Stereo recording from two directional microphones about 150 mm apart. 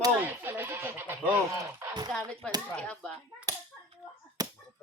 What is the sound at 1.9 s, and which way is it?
Speech, 25° right (ahead or behind).